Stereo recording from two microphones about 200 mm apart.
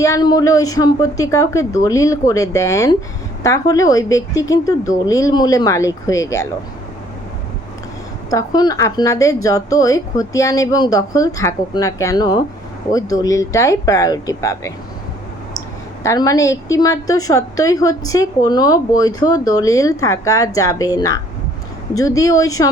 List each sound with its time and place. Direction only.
0.0 s a woman's voice: 20° left (ahead or behind)
8.3 s a woman's voice: 20° left (ahead or behind)
16.0 s a woman's voice: 15° left (ahead or behind)